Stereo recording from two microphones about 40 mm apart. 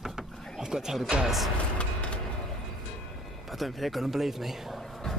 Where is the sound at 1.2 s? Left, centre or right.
Centre.